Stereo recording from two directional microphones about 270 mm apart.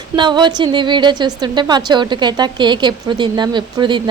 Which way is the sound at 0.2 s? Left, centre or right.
Centre.